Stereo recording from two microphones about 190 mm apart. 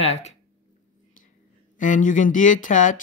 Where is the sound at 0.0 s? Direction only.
35° left (ahead or behind).